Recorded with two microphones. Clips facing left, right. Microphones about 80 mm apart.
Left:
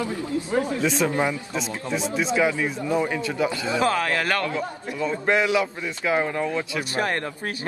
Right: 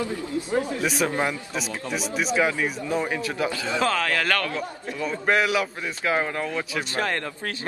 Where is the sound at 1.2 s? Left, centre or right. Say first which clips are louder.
Left 2 dB; left.